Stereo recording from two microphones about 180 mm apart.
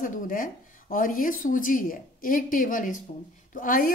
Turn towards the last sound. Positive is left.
turn(degrees=50)  # may be behind; listen again after turning